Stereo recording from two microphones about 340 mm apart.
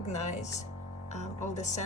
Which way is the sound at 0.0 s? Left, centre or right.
Centre.